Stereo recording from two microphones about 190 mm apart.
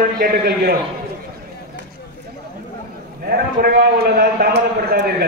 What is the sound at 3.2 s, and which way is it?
A man's voice, 50° right (ahead or behind).